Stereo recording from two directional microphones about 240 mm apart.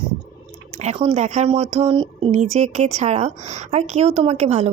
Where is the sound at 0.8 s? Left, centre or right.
Right.